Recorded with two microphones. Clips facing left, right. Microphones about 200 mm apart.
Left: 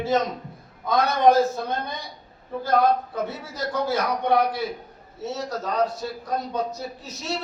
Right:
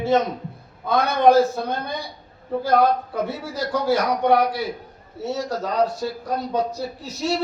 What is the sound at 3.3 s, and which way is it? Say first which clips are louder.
Speech: right 4 dB; 30° right (ahead or behind).